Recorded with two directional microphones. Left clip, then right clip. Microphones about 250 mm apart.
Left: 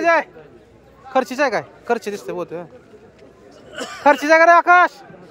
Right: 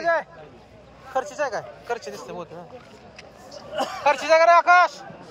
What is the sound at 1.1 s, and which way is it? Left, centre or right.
A man's voice, left.